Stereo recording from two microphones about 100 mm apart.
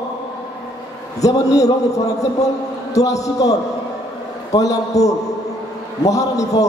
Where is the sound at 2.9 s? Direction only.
35° left (ahead or behind).